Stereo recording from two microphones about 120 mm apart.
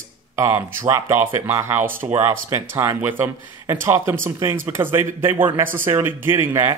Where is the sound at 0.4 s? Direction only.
20° right (ahead or behind).